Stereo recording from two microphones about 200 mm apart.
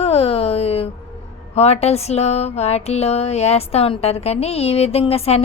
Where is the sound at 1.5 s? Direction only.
30° left (ahead or behind).